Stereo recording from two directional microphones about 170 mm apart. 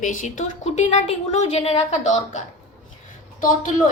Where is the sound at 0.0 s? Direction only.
50° left (ahead or behind).